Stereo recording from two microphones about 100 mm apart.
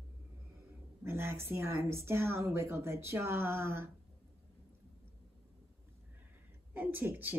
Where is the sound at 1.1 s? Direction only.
25° right (ahead or behind).